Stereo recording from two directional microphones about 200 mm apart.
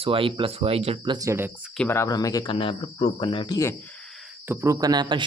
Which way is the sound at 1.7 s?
10° left (ahead or behind).